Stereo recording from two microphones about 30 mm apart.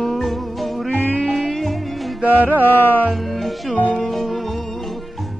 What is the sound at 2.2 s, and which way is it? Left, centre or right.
Music, right.